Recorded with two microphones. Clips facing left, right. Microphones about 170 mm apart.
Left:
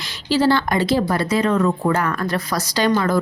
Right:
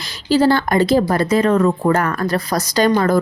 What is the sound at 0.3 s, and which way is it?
Speech, 45° right (ahead or behind).